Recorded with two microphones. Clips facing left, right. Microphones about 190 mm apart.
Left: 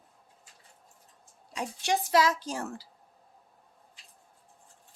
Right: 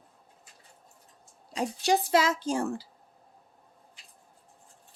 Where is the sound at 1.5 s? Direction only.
35° right (ahead or behind).